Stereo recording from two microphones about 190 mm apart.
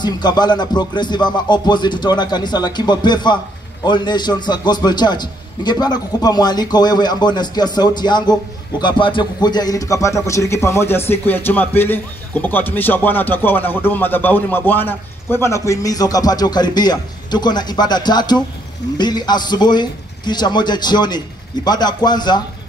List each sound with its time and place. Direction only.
0.0 s a man's voice: 20° left (ahead or behind)